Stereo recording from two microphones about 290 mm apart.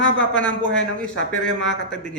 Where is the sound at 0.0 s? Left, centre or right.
Left.